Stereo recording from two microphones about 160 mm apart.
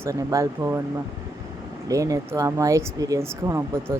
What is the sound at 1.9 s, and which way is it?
Speech, 20° right (ahead or behind).